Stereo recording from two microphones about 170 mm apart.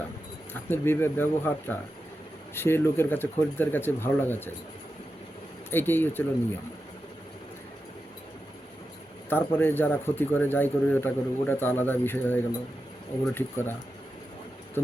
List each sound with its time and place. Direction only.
0.5 s speech: 15° left (ahead or behind)
5.7 s speech: 10° left (ahead or behind)
9.3 s speech: 10° left (ahead or behind)